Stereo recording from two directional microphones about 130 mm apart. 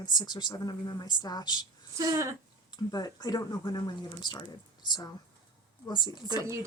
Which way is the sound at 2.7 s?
30° left (ahead or behind).